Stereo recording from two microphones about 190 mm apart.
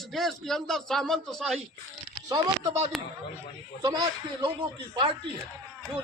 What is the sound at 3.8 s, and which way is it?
Speech, 20° right (ahead or behind).